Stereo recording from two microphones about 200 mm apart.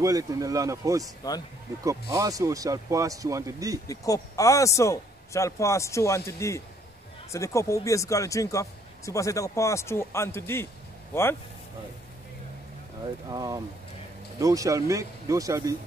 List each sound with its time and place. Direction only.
0.0 s speech: 15° right (ahead or behind)
3.8 s speech: 15° left (ahead or behind)
13.3 s speech: 15° right (ahead or behind)